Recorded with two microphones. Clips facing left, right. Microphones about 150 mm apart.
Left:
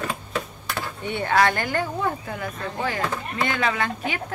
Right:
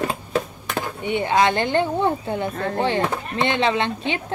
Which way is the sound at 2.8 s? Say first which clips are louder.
Right 3 dB; 25° right (ahead or behind).